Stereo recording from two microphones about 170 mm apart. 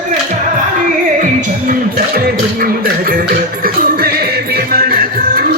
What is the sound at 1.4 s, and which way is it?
Music, 55° right (ahead or behind).